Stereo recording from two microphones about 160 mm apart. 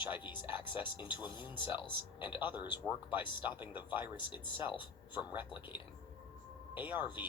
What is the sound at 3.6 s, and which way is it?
Speech, 10° right (ahead or behind).